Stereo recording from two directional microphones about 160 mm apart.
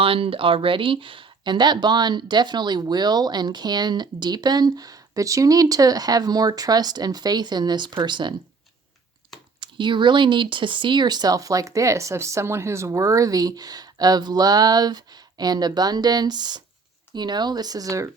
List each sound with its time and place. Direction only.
0.0 s speech: 35° right (ahead or behind)
9.6 s speech: 30° right (ahead or behind)